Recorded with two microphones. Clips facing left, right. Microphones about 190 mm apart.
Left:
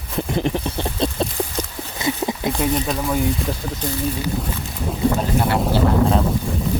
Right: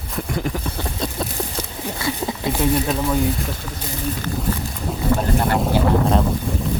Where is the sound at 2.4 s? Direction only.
5° right (ahead or behind).